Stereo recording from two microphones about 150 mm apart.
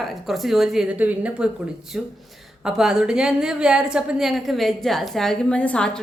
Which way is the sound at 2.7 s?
5° right (ahead or behind).